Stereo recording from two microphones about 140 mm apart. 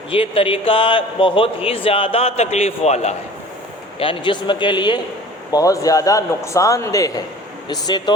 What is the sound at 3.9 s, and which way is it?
A man's voice, 35° left (ahead or behind).